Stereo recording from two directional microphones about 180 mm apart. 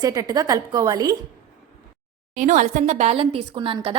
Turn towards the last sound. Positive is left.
turn(degrees=-30)  # may be behind; listen again after turning